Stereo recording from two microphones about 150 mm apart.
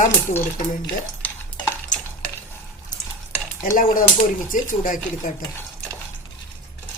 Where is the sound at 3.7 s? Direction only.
65° left (ahead or behind).